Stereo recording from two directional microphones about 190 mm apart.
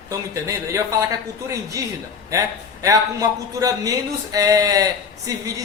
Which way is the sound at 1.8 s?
15° right (ahead or behind).